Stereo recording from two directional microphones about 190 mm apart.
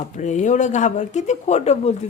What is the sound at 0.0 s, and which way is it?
A woman's voice, 40° left (ahead or behind).